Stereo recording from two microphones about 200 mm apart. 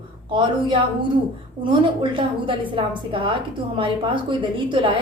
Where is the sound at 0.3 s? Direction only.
25° right (ahead or behind).